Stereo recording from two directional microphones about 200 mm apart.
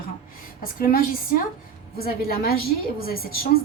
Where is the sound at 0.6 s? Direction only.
45° left (ahead or behind).